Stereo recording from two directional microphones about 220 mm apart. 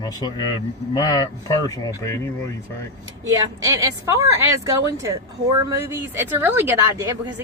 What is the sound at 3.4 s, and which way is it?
Speech, 15° right (ahead or behind).